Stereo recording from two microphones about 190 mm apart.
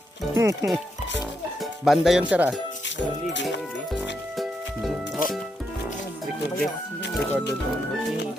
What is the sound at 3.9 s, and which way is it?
Music, centre (ahead or behind).